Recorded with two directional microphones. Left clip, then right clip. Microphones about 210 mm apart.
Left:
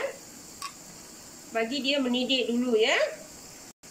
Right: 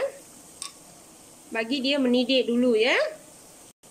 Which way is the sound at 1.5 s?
55° right (ahead or behind).